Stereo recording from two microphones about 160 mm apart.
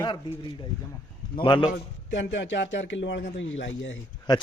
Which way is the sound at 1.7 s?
90° left.